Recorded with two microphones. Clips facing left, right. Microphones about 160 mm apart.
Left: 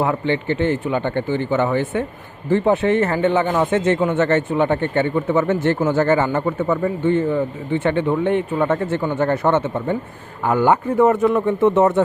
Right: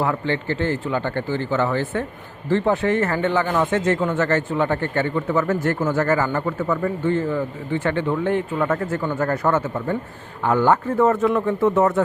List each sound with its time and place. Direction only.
0.0 s a man's voice: 20° left (ahead or behind)
10.4 s a man's voice: 10° left (ahead or behind)